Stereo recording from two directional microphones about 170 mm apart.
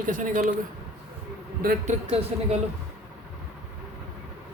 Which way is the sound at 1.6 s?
60° right (ahead or behind).